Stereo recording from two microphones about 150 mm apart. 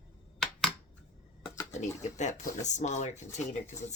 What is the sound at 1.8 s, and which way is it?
Speech, 50° left (ahead or behind).